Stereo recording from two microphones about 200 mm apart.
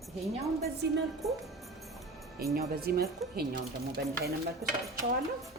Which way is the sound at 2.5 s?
50° right (ahead or behind).